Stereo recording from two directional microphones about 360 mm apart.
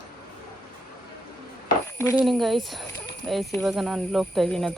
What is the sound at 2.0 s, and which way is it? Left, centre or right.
Speech, centre.